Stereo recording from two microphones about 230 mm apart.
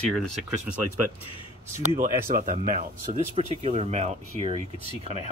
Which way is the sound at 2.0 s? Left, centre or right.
Right.